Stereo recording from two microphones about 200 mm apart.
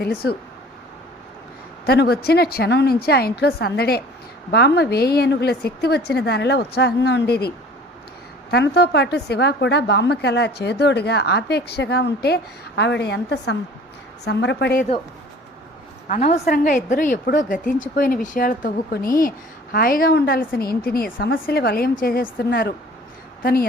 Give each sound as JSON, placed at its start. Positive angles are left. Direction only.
{"t": 0.0, "sound": "a woman's voice", "side_deg": 50}
{"t": 1.9, "sound": "a woman's voice", "side_deg": 50}
{"t": 16.0, "sound": "a woman's voice", "side_deg": 35}